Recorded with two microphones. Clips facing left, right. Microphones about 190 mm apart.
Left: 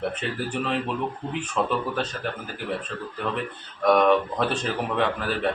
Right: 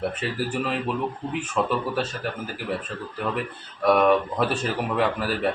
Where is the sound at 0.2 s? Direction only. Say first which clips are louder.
Right 2 dB; 5° right (ahead or behind).